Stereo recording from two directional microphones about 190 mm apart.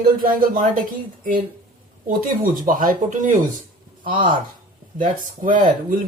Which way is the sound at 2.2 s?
45° right (ahead or behind).